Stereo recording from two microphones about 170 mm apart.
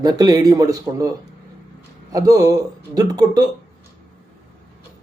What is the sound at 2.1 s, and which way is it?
Speech, 20° right (ahead or behind).